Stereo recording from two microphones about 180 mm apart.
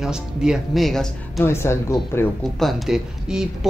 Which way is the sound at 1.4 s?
15° left (ahead or behind).